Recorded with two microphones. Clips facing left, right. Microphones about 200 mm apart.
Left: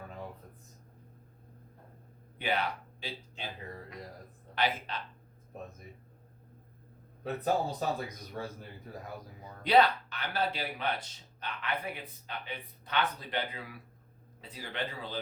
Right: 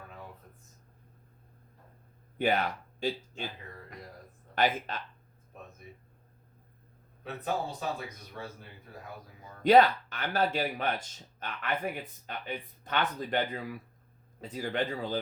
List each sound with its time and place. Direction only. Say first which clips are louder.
2.4 s speech: right 4 dB; 45° right (ahead or behind)
4.5 s a man's voice: right 4 dB; 45° right (ahead or behind)
7.4 s speech: left 2 dB; 40° left (ahead or behind)
9.6 s a man's voice: right 4 dB; 45° right (ahead or behind)